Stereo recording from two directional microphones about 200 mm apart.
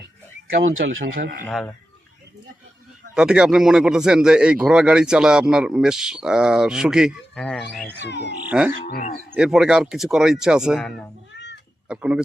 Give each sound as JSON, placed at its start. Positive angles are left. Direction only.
{"t": 0.6, "sound": "speech", "side_deg": -80}
{"t": 1.5, "sound": "speech", "side_deg": 5}
{"t": 3.2, "sound": "speech", "side_deg": -5}
{"t": 8.0, "sound": "speech", "side_deg": 60}
{"t": 8.4, "sound": "wild animals", "side_deg": -5}
{"t": 8.8, "sound": "speech", "side_deg": 50}
{"t": 9.3, "sound": "speech", "side_deg": -5}